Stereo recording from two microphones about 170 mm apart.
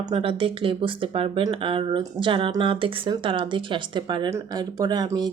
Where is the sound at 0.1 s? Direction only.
30° right (ahead or behind).